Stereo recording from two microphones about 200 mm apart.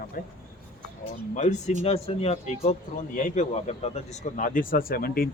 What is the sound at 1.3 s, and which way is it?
A man's voice, 35° left (ahead or behind).